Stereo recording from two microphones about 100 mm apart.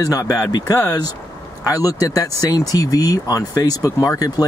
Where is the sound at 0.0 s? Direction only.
35° left (ahead or behind).